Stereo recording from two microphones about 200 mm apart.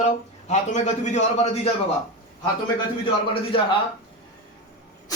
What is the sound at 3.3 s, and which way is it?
Speech, 25° left (ahead or behind).